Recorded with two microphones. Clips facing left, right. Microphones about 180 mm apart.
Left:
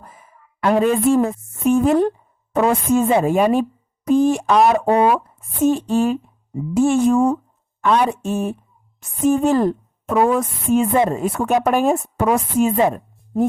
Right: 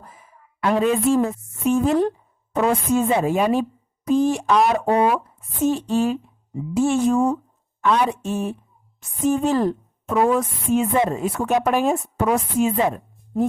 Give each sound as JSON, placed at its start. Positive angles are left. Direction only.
{"t": 0.2, "sound": "a woman's voice", "side_deg": 45}